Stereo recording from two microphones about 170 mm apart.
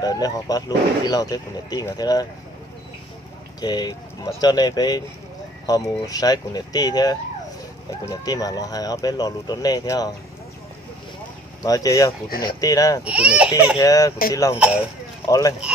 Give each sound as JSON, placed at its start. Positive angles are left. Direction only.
{"t": 0.0, "sound": "speech", "side_deg": 20}
{"t": 3.6, "sound": "speech", "side_deg": 25}
{"t": 11.6, "sound": "speech", "side_deg": 20}
{"t": 12.3, "sound": "speech", "side_deg": 60}
{"t": 12.5, "sound": "speech", "side_deg": 20}
{"t": 13.0, "sound": "speech", "side_deg": -5}
{"t": 13.7, "sound": "speech", "side_deg": 20}